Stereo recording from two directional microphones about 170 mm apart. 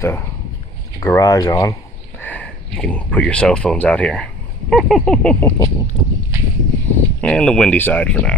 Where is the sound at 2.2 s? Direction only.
10° left (ahead or behind).